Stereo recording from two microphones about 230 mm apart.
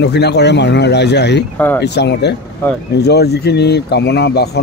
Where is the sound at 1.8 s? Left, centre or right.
Left.